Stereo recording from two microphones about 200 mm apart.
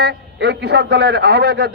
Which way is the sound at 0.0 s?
55° right (ahead or behind).